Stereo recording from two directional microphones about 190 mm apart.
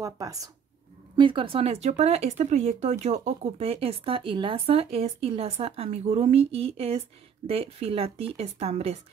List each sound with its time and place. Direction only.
0.0 s speech: 20° right (ahead or behind); by 9.0 s 35° right (ahead or behind)